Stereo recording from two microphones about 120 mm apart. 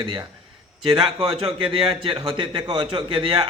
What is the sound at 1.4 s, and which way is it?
A man's voice, 50° right (ahead or behind).